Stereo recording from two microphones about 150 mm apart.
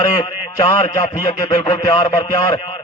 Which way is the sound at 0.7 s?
25° left (ahead or behind).